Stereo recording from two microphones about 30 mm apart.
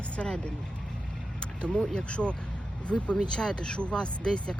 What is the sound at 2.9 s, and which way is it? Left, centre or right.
Speech, centre.